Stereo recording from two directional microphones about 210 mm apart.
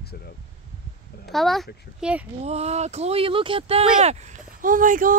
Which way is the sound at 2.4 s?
30° right (ahead or behind).